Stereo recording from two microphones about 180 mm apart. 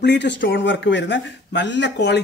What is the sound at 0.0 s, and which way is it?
Speech, 70° left (ahead or behind).